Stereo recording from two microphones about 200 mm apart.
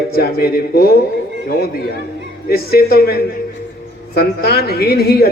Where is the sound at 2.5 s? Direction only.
50° left (ahead or behind).